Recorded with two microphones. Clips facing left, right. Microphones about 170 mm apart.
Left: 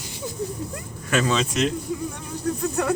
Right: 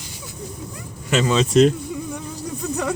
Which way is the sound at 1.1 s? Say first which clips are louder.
Right 3 dB; 20° right (ahead or behind).